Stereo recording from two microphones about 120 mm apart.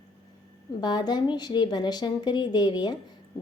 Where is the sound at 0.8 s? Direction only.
35° left (ahead or behind).